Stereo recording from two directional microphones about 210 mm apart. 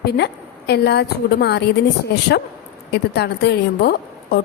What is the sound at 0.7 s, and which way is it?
Speech, 50° left (ahead or behind).